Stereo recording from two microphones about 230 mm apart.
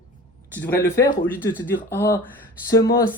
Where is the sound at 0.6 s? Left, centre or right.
Centre.